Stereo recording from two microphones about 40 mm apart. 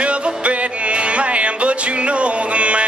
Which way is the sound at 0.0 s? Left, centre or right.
Right.